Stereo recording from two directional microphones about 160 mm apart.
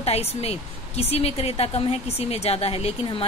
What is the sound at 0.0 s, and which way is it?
Speech, 40° left (ahead or behind).